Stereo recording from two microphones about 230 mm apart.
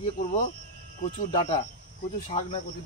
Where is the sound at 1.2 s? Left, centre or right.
Left.